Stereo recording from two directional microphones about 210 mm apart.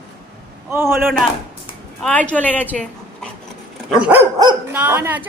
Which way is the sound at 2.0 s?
5° left (ahead or behind).